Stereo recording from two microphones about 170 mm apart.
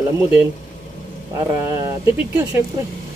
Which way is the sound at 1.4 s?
15° right (ahead or behind).